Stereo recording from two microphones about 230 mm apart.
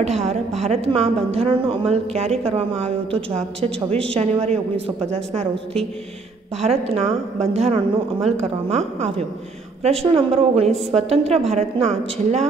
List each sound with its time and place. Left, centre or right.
0.0 s a woman's voice: right